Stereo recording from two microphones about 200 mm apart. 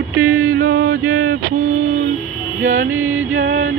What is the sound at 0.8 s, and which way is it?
Music, 90° right.